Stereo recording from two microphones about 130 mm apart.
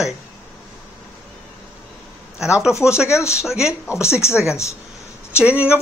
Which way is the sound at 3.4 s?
5° right (ahead or behind).